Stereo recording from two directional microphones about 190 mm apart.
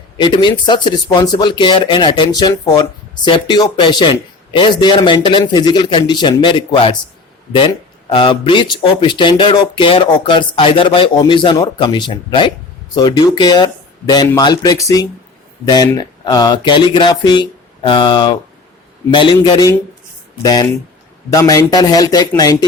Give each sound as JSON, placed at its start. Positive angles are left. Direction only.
{"t": 0.2, "sound": "speech", "side_deg": 25}